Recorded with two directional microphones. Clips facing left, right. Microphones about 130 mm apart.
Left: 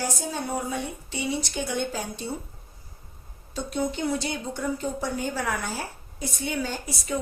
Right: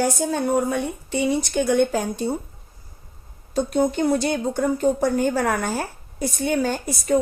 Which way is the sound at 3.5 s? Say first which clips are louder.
Right 8 dB; 50° right (ahead or behind).